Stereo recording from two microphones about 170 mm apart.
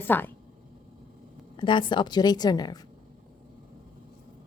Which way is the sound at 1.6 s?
30° left (ahead or behind).